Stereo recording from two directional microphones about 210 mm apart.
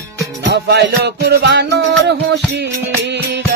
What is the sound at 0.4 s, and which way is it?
Music, 55° right (ahead or behind).